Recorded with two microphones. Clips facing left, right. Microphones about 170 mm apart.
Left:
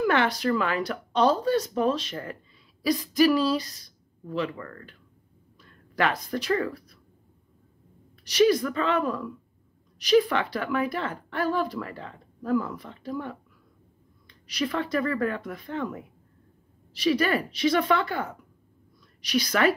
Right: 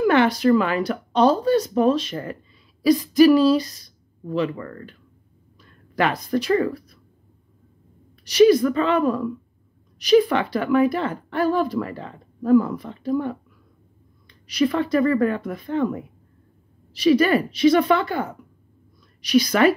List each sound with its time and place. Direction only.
0.0 s speech: 10° right (ahead or behind)
5.9 s speech: 15° right (ahead or behind)
8.3 s speech: 10° right (ahead or behind)
14.5 s speech: 20° right (ahead or behind)
17.0 s speech: 15° right (ahead or behind)